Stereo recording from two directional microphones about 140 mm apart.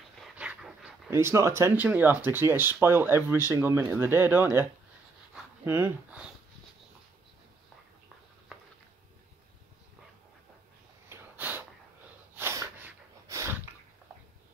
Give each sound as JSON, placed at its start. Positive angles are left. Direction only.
{"t": 0.2, "sound": "dog", "side_deg": -5}
{"t": 1.1, "sound": "speech", "side_deg": -20}
{"t": 5.7, "sound": "speech", "side_deg": -15}
{"t": 11.1, "sound": "sniff", "side_deg": -15}
{"t": 12.4, "sound": "snort", "side_deg": -15}